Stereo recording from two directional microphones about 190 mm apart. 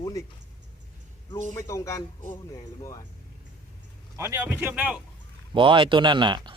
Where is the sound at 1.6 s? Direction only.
15° left (ahead or behind).